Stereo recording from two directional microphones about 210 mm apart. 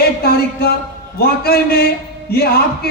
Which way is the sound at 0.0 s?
45° left (ahead or behind).